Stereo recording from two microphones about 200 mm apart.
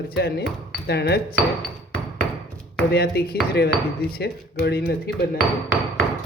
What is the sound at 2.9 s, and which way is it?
Speech, 50° left (ahead or behind).